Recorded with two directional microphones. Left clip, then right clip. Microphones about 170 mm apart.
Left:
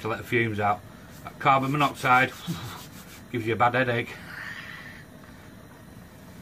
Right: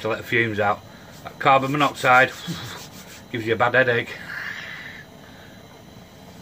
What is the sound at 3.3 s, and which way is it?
Speech, centre (ahead or behind).